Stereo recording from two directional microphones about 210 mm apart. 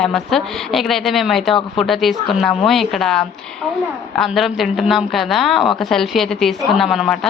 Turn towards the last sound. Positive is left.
turn(degrees=0)  # may be behind; listen again after turning